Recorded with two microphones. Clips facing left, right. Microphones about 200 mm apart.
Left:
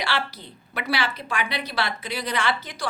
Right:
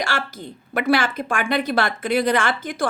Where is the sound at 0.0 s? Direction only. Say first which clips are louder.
Right 2 dB; 45° right (ahead or behind).